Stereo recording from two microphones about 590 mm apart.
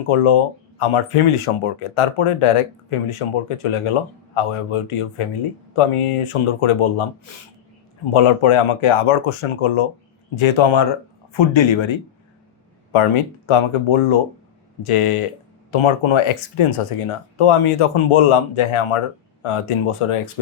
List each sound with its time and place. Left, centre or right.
0.1 s speech: left
8.1 s speech: left
13.5 s speech: left